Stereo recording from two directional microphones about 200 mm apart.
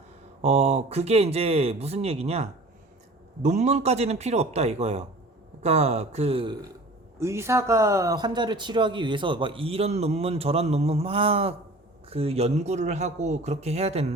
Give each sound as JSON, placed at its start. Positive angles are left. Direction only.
{"t": 0.4, "sound": "speech", "side_deg": -30}
{"t": 7.2, "sound": "speech", "side_deg": -15}